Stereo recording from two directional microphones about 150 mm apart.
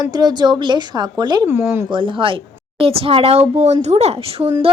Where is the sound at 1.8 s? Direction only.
35° right (ahead or behind).